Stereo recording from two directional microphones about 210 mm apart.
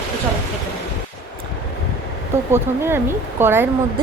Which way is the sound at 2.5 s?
10° right (ahead or behind).